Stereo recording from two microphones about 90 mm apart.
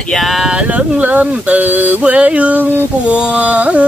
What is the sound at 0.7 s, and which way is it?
Speech, 15° right (ahead or behind).